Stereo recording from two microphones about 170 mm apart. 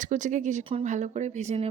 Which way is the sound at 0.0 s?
45° right (ahead or behind).